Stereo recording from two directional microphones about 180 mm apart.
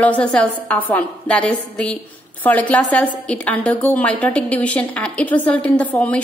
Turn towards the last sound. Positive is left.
turn(degrees=10)  # may be behind; listen again after turning